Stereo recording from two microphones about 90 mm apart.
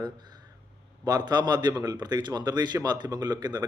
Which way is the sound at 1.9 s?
55° right (ahead or behind).